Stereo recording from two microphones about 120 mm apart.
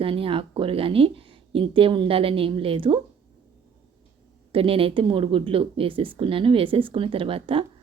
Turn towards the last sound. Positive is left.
turn(degrees=-50)  # may be behind; listen again after turning